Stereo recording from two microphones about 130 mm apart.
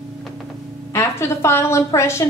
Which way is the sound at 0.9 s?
20° left (ahead or behind).